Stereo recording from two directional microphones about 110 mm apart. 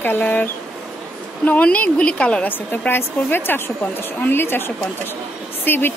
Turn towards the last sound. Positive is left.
turn(degrees=20)  # may be behind; listen again after turning